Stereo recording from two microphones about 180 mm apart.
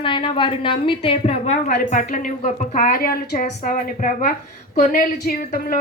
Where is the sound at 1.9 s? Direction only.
45° left (ahead or behind).